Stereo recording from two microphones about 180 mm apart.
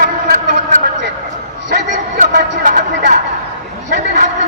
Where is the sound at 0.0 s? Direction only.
45° right (ahead or behind).